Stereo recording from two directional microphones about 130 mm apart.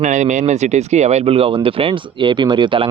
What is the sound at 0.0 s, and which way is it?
Speech, 65° right (ahead or behind).